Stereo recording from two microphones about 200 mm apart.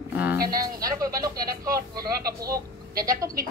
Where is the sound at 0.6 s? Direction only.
15° right (ahead or behind).